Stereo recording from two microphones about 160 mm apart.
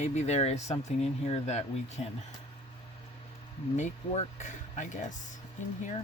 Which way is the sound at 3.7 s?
50° left (ahead or behind).